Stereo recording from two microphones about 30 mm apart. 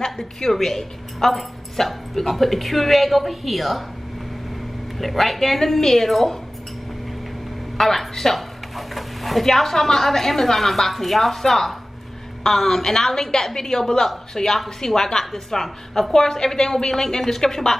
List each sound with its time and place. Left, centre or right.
0.0 s a woman's voice: centre
4.9 s a woman's voice: centre
7.7 s a woman's voice: centre
8.4 s a woman's voice: centre